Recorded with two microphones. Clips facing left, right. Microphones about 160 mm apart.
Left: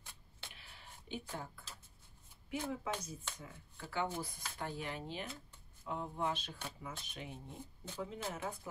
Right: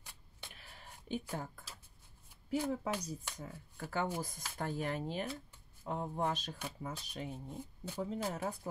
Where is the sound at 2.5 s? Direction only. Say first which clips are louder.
Right 4 dB; 35° right (ahead or behind).